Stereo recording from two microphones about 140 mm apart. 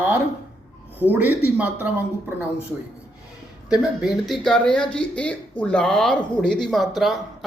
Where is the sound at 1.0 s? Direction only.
20° left (ahead or behind).